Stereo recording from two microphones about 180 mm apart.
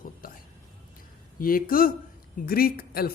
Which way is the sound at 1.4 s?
50° left (ahead or behind).